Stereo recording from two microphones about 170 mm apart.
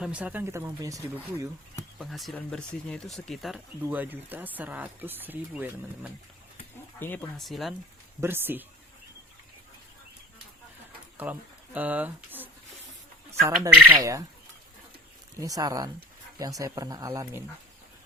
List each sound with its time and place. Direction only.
0.0 s speech: 5° right (ahead or behind)
2.0 s speech: centre (ahead or behind)
3.8 s speech: 10° right (ahead or behind)
7.0 s speech: 10° left (ahead or behind)
7.4 s speech: centre (ahead or behind)
8.2 s speech: 15° right (ahead or behind)
11.2 s speech: 10° right (ahead or behind)
15.4 s speech: 20° right (ahead or behind)